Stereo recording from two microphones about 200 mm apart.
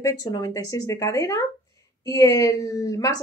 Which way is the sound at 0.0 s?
20° left (ahead or behind).